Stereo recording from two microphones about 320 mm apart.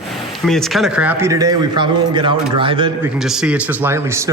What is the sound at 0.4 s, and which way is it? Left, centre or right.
Speech, centre.